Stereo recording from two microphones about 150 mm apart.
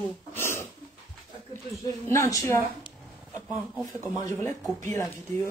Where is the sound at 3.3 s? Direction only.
5° right (ahead or behind).